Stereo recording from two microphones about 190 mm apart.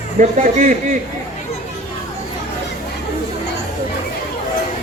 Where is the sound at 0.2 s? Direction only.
40° right (ahead or behind).